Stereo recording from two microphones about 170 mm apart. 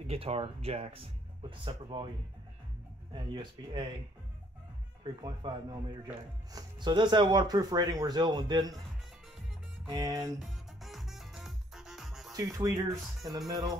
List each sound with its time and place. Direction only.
0.0 s speech: 35° right (ahead or behind)
3.2 s speech: 30° right (ahead or behind)
5.2 s speech: 25° right (ahead or behind)
9.8 s speech: 20° right (ahead or behind)
10.4 s music: centre (ahead or behind)
12.4 s speech: 20° right (ahead or behind)